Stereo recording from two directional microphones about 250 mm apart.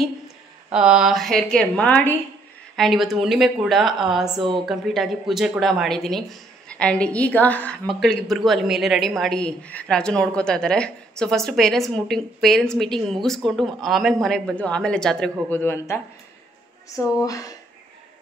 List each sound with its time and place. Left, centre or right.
0.7 s a woman's voice: centre
4.4 s speech: centre
4.6 s a woman's voice: centre
17.2 s speech: centre